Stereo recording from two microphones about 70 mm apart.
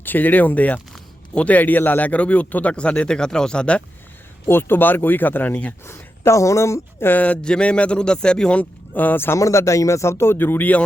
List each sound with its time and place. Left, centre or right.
0.0 s a man's voice: left
4.4 s a man's voice: left
5.8 s speech: left
7.1 s a man's voice: left
8.9 s speech: left
9.4 s speech: left